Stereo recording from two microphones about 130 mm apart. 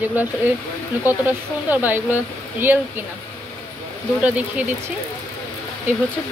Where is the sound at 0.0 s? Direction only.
15° right (ahead or behind).